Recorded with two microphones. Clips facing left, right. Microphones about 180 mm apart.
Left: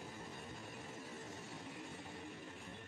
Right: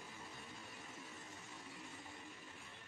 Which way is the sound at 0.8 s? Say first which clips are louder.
Left 5 dB; 40° left (ahead or behind).